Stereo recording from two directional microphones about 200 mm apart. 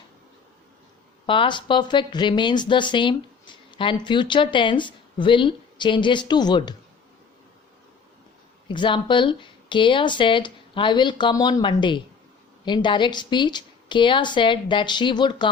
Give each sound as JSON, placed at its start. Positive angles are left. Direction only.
{"t": 1.3, "sound": "speech", "side_deg": 25}
{"t": 8.6, "sound": "speech", "side_deg": 25}